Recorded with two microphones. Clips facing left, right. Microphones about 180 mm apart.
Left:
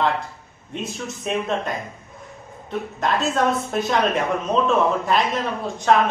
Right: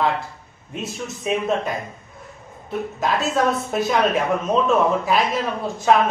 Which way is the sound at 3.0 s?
5° right (ahead or behind).